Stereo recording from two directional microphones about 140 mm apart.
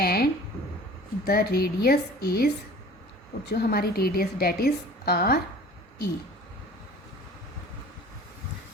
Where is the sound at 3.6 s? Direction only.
90° left.